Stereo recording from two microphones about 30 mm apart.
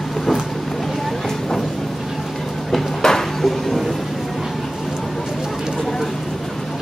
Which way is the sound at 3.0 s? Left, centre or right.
Centre.